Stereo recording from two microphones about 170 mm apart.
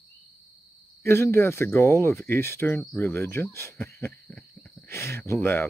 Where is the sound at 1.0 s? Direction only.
15° left (ahead or behind).